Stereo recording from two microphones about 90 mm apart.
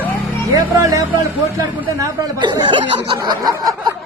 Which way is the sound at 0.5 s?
40° right (ahead or behind).